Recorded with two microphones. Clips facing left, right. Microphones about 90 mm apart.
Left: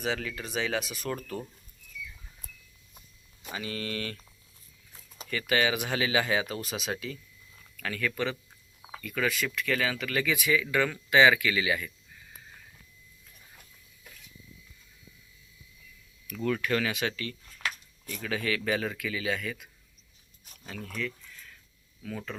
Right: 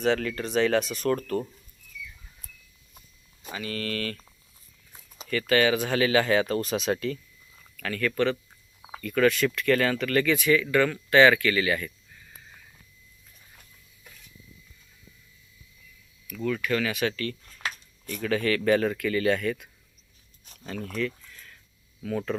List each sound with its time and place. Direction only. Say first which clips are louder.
0.0 s speech: right 7 dB; 5° left (ahead or behind)
2.4 s a sound: left 2 dB; 20° left (ahead or behind)
3.5 s speech: right 3 dB; 25° left (ahead or behind)
5.0 s a sound: even; centre (ahead or behind)
5.3 s speech: right 5 dB; 15° left (ahead or behind)
16.3 s speech: right 1 dB; 30° left (ahead or behind)
18.0 s speech: right 6 dB; 5° left (ahead or behind)
20.7 s speech: right 6 dB; centre (ahead or behind)